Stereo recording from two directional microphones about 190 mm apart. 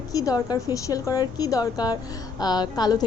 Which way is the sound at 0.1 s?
20° left (ahead or behind).